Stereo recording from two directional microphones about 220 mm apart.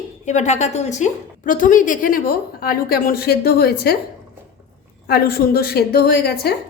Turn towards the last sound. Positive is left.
turn(degrees=45)  # may be behind; listen again after turning